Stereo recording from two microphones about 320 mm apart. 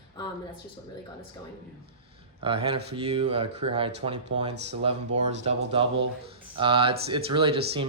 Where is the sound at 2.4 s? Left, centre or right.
Centre.